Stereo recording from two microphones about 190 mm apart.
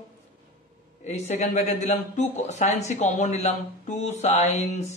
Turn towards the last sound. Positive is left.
turn(degrees=40)  # may be behind; listen again after turning